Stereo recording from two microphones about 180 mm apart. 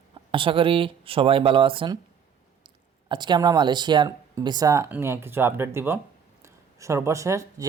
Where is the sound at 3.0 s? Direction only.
25° right (ahead or behind).